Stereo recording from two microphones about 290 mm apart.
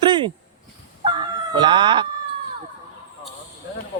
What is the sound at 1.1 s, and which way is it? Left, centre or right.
Chicken, centre.